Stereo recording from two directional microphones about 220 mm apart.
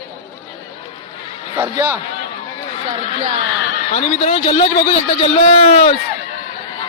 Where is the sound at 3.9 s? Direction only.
30° left (ahead or behind).